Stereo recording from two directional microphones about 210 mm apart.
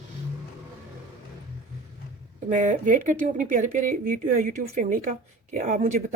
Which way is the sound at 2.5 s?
35° right (ahead or behind).